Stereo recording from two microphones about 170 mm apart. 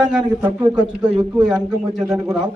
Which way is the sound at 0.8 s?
25° right (ahead or behind).